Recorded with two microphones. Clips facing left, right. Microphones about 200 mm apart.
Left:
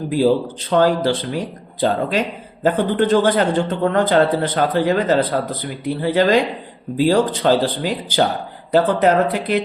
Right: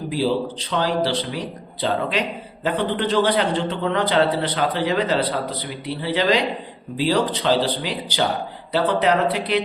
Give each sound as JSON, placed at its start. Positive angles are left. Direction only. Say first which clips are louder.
{"t": 0.1, "sound": "a man's voice", "louder": "left 6 dB", "side_deg": 50}